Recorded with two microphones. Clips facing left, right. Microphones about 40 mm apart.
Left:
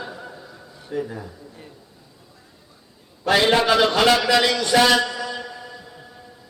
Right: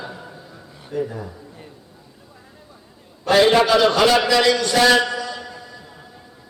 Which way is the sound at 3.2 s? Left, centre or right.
Centre.